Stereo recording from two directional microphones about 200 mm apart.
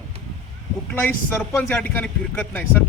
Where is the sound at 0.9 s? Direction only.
10° left (ahead or behind).